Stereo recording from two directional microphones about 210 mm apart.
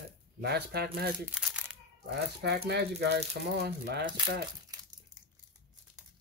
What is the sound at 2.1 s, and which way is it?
Speech, 50° right (ahead or behind).